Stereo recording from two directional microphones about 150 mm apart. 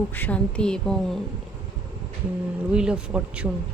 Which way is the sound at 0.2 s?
10° left (ahead or behind).